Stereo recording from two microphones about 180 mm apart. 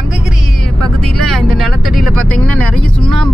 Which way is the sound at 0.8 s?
5° left (ahead or behind).